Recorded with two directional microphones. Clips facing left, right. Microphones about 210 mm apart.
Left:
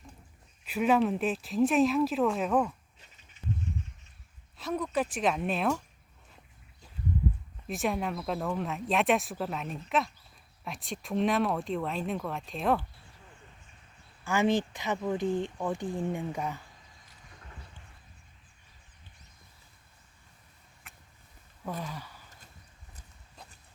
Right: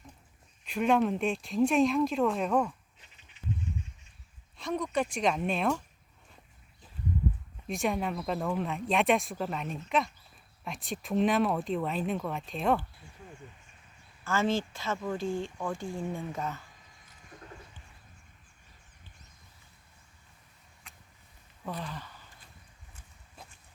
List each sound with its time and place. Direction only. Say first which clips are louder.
0.6 s speech: left 1 dB; 5° left (ahead or behind)
4.5 s speech: even; 5° left (ahead or behind)
7.7 s speech: even; centre (ahead or behind)
14.3 s speech: left 2 dB; 15° left (ahead or behind)
21.6 s a sound: left 1 dB; 10° left (ahead or behind)